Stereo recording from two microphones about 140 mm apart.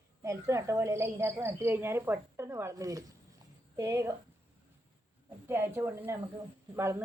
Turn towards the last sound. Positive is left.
turn(degrees=-20)  # may be behind; listen again after turning